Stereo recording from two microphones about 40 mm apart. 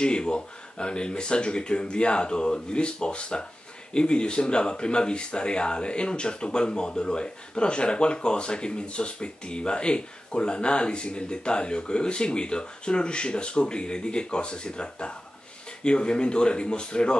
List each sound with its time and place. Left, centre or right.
0.0 s speech: left